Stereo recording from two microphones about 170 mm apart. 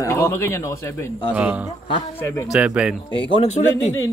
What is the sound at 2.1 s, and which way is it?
Speech, 15° left (ahead or behind).